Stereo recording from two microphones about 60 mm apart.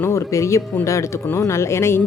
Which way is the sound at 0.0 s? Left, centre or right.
Left.